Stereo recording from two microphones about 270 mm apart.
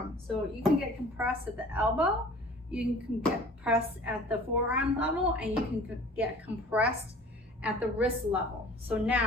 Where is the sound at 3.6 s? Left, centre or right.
Centre.